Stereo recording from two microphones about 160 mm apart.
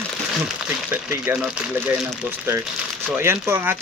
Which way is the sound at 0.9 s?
10° right (ahead or behind).